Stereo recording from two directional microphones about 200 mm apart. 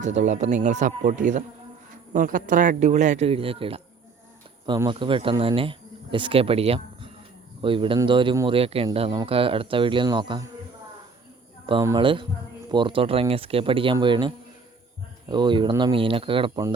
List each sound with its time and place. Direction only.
0.0 s a man's voice: 35° right (ahead or behind)
11.6 s a man's voice: 20° right (ahead or behind)